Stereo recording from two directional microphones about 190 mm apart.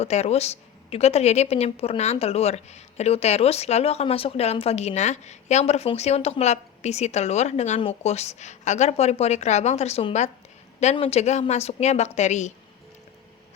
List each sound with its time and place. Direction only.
0.0 s a woman's voice: 35° left (ahead or behind)